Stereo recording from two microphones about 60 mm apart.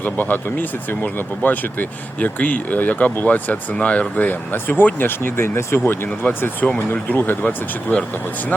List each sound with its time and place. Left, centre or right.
0.0 s speech: left
3.8 s speech: centre
7.4 s speech: centre